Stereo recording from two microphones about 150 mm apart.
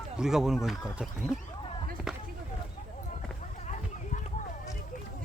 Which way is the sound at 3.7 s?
55° left (ahead or behind).